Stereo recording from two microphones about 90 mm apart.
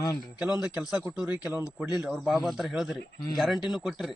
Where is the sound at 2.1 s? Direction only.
Centre (ahead or behind).